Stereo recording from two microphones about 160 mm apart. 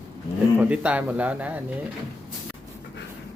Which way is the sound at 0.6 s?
10° right (ahead or behind).